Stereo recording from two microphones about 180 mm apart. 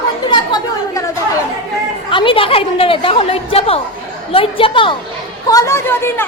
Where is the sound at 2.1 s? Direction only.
30° left (ahead or behind).